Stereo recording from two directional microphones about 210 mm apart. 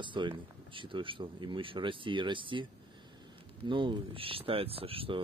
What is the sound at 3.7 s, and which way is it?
Speech, 25° right (ahead or behind).